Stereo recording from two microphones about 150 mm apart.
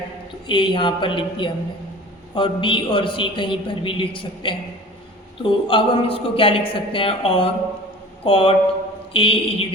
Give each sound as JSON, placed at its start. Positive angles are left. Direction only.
{"t": 0.4, "sound": "a man's voice", "side_deg": 30}